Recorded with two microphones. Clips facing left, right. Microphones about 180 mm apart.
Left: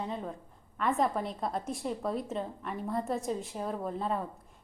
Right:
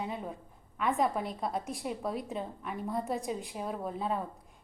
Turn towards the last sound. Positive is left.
turn(degrees=-5)  # may be behind; listen again after turning